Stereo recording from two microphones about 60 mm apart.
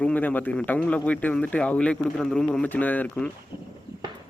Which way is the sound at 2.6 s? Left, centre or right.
Left.